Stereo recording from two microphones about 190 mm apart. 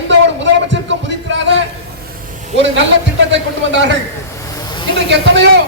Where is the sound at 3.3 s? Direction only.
70° right (ahead or behind).